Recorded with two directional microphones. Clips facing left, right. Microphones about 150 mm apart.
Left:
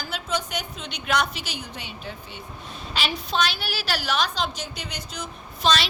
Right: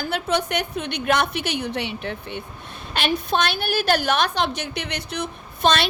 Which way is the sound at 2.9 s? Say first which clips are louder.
Right 5 dB; 55° right (ahead or behind).